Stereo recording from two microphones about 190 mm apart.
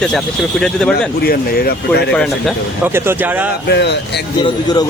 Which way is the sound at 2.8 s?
10° right (ahead or behind).